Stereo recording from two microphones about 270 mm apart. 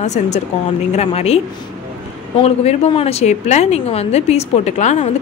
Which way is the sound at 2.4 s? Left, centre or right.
Left.